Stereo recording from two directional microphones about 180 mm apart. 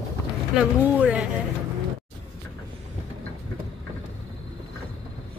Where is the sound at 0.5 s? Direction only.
5° right (ahead or behind).